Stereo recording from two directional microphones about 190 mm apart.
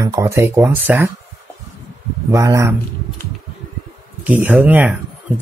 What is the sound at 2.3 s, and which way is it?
Speech, 15° right (ahead or behind).